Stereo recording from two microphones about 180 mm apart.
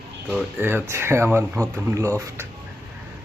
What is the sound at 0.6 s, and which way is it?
Speech, 10° right (ahead or behind).